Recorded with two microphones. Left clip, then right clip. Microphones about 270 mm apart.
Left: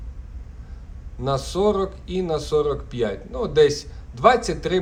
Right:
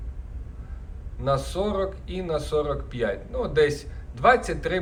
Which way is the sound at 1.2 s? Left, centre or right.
Centre.